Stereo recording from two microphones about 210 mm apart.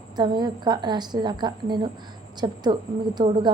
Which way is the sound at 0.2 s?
20° right (ahead or behind).